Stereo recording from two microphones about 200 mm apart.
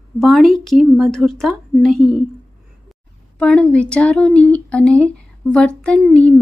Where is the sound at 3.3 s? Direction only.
5° left (ahead or behind).